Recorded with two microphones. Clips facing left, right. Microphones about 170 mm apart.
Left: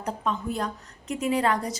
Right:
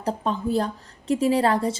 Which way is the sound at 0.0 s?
30° right (ahead or behind).